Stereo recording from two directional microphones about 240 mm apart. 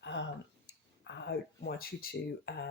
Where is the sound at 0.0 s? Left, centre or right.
Left.